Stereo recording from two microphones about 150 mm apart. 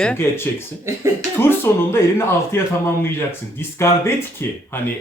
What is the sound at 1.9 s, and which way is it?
Speech, 15° left (ahead or behind).